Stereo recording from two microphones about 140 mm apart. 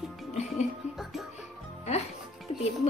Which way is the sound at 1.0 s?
Centre (ahead or behind).